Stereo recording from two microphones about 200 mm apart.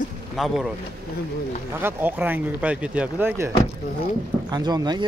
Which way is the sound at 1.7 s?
10° right (ahead or behind).